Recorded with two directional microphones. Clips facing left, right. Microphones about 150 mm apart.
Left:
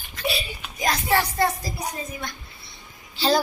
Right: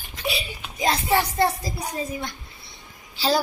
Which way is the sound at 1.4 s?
25° right (ahead or behind).